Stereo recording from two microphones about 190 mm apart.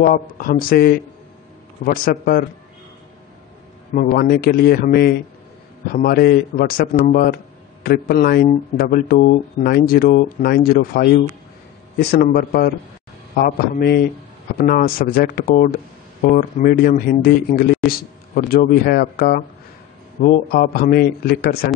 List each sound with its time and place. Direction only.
0.0 s speech: 50° left (ahead or behind)
3.9 s speech: 50° left (ahead or behind)